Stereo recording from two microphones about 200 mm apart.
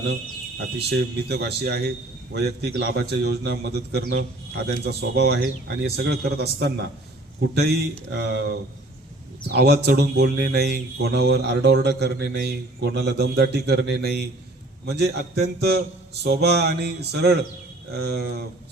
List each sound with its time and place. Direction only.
0.9 s speech: 55° right (ahead or behind)
9.6 s speech: 55° right (ahead or behind)